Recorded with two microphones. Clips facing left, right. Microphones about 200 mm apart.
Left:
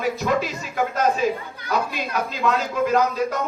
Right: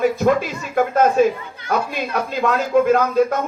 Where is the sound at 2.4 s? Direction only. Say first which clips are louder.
Right 6 dB; 50° right (ahead or behind).